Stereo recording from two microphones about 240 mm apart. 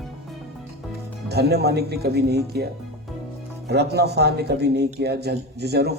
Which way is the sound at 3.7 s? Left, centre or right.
Right.